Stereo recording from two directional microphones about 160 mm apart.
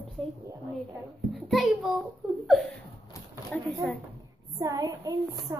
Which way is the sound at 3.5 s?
5° left (ahead or behind).